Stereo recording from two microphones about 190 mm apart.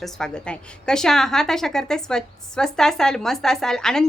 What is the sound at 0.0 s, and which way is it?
A woman's voice, 5° left (ahead or behind).